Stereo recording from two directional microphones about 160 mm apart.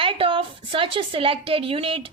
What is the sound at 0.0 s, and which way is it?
A woman's voice, 35° right (ahead or behind).